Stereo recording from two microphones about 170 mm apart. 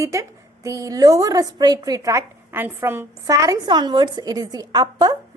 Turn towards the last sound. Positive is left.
turn(degrees=-25)  # may be behind; listen again after turning